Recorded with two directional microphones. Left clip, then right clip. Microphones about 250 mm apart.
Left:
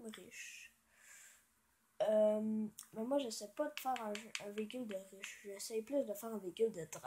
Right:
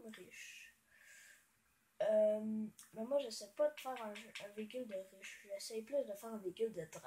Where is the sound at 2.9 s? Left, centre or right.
Left.